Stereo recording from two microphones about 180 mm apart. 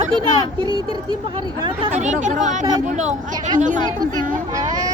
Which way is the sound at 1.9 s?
40° right (ahead or behind).